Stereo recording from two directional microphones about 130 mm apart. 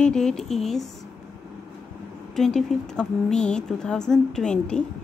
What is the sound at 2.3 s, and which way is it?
Speech, 5° left (ahead or behind).